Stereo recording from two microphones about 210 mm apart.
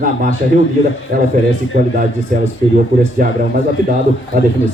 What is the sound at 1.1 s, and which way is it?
Speech, 45° right (ahead or behind).